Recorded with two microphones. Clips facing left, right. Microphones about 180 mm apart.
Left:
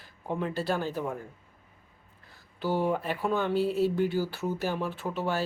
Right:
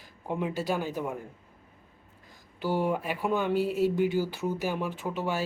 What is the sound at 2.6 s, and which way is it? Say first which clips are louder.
Speech: even; 10° right (ahead or behind).